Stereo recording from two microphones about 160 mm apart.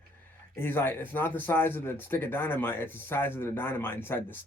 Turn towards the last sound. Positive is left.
turn(degrees=15)  # may be behind; listen again after turning